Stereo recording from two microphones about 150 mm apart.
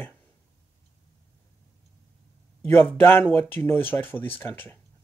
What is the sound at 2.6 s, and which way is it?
A man's voice, 15° left (ahead or behind).